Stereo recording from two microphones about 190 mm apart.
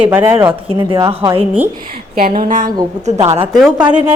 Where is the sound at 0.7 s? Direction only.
25° right (ahead or behind).